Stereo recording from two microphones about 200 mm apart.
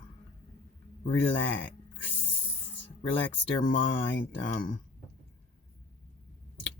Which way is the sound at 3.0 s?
65° left (ahead or behind).